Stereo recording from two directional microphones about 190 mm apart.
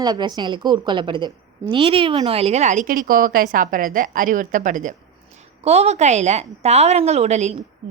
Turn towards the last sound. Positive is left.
turn(degrees=-35)  # may be behind; listen again after turning